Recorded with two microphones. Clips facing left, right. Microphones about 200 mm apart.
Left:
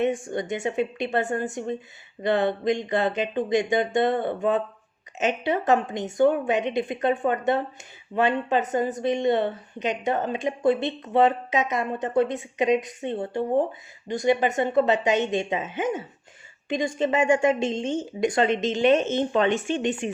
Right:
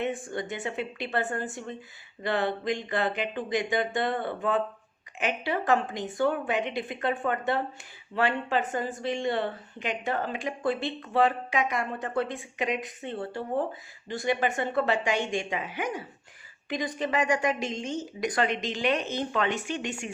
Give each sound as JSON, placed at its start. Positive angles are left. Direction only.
{"t": 0.0, "sound": "a woman's voice", "side_deg": 20}